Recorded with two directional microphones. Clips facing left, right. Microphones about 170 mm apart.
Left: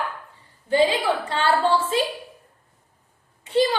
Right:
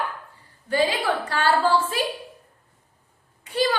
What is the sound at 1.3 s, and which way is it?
Speech, 25° left (ahead or behind).